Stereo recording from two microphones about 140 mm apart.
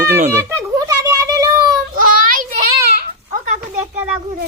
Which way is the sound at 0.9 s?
25° right (ahead or behind).